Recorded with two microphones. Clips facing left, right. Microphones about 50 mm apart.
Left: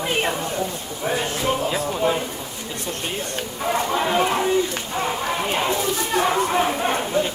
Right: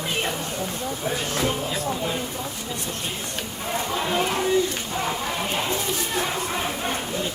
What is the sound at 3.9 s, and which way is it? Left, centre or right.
Speech, left.